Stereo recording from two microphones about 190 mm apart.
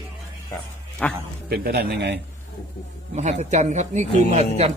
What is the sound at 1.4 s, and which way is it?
Speech, 55° right (ahead or behind).